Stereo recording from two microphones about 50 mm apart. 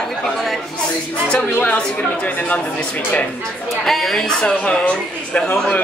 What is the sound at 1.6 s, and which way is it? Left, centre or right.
A woman's voice, left.